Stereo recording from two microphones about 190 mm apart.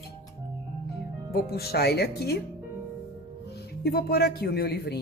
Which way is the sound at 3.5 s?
55° left (ahead or behind).